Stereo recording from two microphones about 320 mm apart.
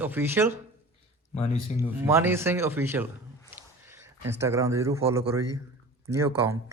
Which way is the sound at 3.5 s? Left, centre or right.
Centre.